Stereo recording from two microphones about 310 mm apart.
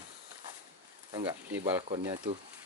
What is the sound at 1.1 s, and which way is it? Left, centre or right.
Speech, centre.